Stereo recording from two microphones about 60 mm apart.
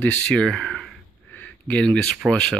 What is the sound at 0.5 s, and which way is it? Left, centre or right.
Speech, centre.